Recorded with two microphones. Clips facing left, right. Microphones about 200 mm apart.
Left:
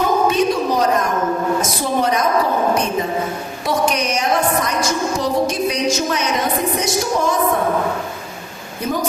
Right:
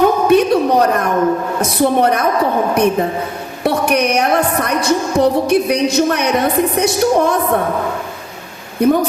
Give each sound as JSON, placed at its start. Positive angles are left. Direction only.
{"t": 0.3, "sound": "a sound", "side_deg": -60}
{"t": 1.6, "sound": "a woman's voice", "side_deg": -60}
{"t": 8.8, "sound": "a woman's voice", "side_deg": -60}